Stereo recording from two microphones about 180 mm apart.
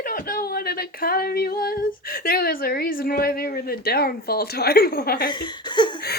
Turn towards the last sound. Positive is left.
turn(degrees=25)  # may be behind; listen again after turning